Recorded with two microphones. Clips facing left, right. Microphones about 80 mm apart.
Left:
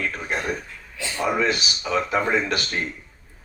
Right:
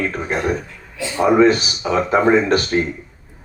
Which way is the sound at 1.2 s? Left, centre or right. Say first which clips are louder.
Right 10 dB; right.